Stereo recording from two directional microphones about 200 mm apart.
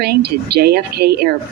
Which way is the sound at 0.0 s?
55° right (ahead or behind).